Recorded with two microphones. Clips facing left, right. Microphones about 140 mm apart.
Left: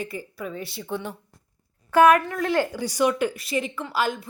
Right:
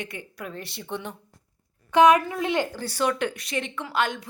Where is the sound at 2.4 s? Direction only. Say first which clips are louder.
Left 2 dB; centre (ahead or behind).